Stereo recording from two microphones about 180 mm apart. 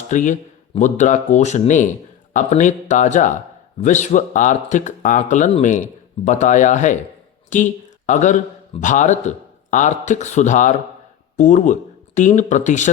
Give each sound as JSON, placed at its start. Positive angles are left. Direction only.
{"t": 0.1, "sound": "speech", "side_deg": 45}